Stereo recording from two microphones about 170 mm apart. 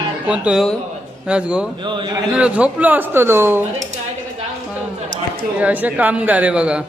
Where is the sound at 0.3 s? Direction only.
5° right (ahead or behind).